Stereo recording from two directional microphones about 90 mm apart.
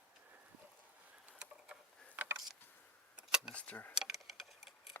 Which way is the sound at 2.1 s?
20° right (ahead or behind).